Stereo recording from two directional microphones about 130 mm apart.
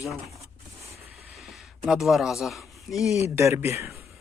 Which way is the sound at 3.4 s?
20° right (ahead or behind).